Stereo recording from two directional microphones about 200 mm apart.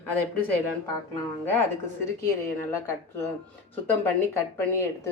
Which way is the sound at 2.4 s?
10° left (ahead or behind).